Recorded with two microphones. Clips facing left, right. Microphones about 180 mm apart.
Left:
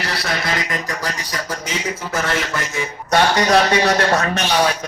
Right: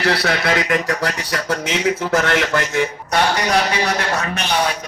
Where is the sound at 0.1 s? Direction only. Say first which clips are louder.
Right 5 dB; 65° right (ahead or behind).